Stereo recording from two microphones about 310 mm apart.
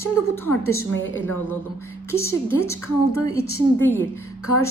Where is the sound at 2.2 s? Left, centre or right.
Centre.